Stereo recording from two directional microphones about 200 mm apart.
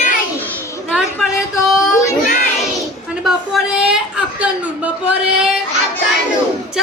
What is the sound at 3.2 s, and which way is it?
A woman's voice, centre (ahead or behind).